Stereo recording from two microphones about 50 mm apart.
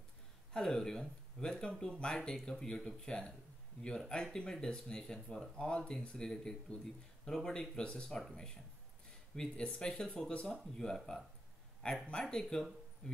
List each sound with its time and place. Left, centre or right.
0.5 s speech: centre
10.3 s speech: left
10.7 s speech: centre
12.1 s speech: centre